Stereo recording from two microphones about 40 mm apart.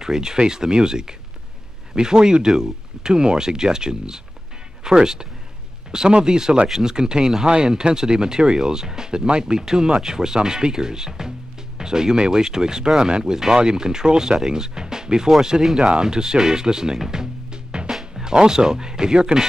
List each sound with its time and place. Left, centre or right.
0.0 s speech: centre
17.9 s music: centre
18.3 s speech: centre